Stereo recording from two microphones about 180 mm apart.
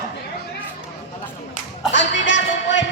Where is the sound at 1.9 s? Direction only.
85° left.